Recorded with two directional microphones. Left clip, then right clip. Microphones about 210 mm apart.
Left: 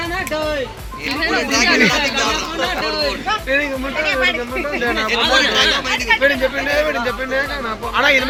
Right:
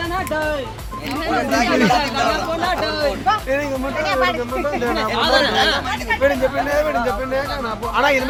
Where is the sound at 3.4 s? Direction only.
20° right (ahead or behind).